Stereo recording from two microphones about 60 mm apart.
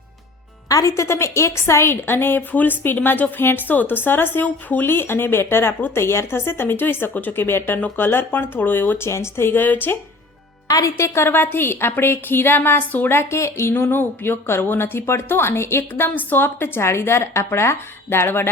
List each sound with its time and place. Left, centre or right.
0.7 s a woman's voice: left
9.0 s speech: left
9.5 s a woman's voice: left
10.7 s a woman's voice: left
13.1 s speech: left
13.7 s a woman's voice: left
15.8 s a woman's voice: left